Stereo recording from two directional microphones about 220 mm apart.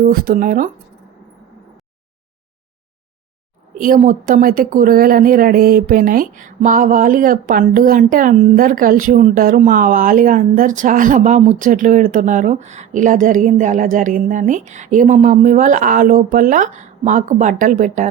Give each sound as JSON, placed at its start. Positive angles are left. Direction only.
{"t": 0.1, "sound": "speech", "side_deg": -40}
{"t": 3.8, "sound": "speech", "side_deg": -35}